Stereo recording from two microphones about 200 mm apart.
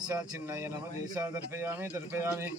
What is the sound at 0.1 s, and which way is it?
Speech, 10° right (ahead or behind).